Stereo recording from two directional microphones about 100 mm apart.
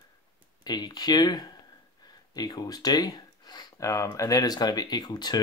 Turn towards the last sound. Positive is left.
turn(degrees=45)  # may be behind; listen again after turning